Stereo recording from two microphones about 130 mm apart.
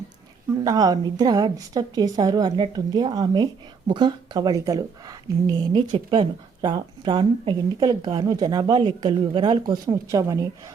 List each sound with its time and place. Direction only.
0.6 s a woman's voice: 30° right (ahead or behind)